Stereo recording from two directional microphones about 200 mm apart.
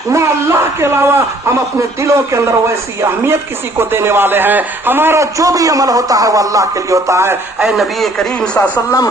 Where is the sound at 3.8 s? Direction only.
10° right (ahead or behind).